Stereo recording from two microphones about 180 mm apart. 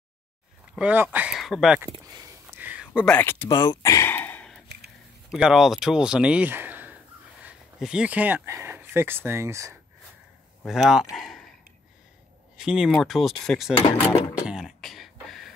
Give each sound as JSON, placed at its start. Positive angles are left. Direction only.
{"t": 0.7, "sound": "speech", "side_deg": -10}
{"t": 1.9, "sound": "speech", "side_deg": -25}
{"t": 2.4, "sound": "a sound", "side_deg": -10}
{"t": 3.1, "sound": "a sound", "side_deg": 10}
{"t": 5.3, "sound": "speech", "side_deg": -5}
{"t": 10.6, "sound": "speech", "side_deg": 0}
{"t": 12.5, "sound": "speech", "side_deg": -5}
{"t": 14.4, "sound": "throat clearing", "side_deg": -5}